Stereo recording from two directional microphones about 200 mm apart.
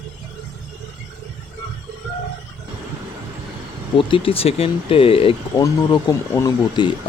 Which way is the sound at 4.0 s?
25° left (ahead or behind).